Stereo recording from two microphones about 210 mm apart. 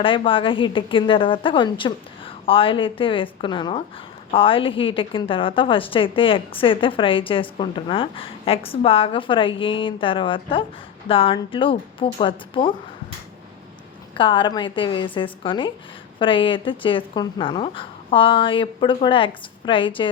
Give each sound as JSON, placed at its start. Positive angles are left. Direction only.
{"t": 0.0, "sound": "a woman's voice", "side_deg": 25}
{"t": 14.2, "sound": "a woman's voice", "side_deg": 25}